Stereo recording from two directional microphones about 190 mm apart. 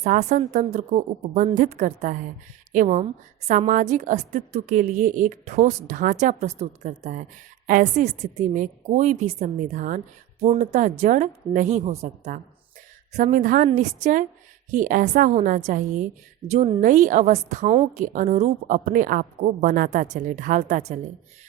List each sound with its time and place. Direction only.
0.0 s a woman's voice: 40° right (ahead or behind)